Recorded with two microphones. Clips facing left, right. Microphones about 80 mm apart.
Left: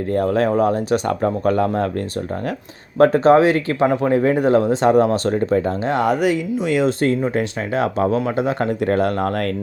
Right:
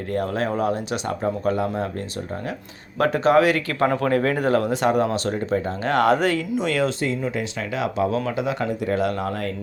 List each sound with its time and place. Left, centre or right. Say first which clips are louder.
0.1 s speech: left 6 dB; left
3.0 s speech: left 5 dB; left
6.0 s speech: even; centre
7.0 s speech: left 6 dB; left